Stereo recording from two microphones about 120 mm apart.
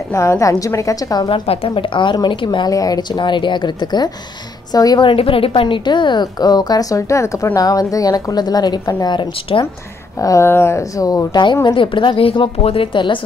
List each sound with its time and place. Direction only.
0.1 s speech: 25° left (ahead or behind)
1.2 s a woman's voice: 50° left (ahead or behind)
2.7 s a woman's voice: 30° left (ahead or behind)
5.0 s a woman's voice: 50° left (ahead or behind)
10.1 s speech: 25° left (ahead or behind)
11.6 s a woman's voice: 45° left (ahead or behind)